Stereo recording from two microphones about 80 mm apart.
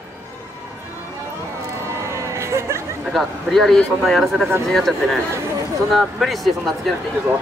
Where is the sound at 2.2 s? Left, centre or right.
Right.